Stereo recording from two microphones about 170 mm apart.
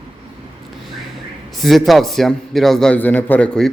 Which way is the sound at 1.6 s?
Centre (ahead or behind).